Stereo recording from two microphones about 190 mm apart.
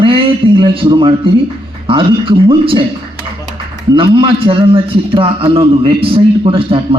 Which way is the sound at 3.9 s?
25° right (ahead or behind).